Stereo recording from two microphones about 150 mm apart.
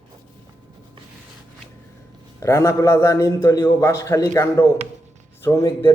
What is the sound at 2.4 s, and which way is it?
A man's voice, 20° left (ahead or behind).